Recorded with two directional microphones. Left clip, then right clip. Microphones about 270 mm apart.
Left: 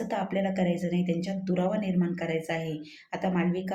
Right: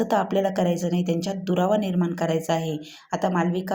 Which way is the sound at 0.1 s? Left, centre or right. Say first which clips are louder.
Right 8 dB; centre.